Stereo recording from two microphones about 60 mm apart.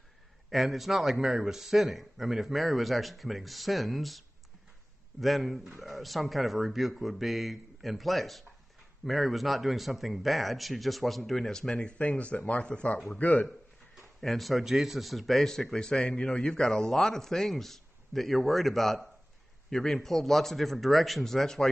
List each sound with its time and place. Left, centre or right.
0.5 s speech: centre
5.2 s speech: centre
12.0 s speech: left
14.2 s speech: centre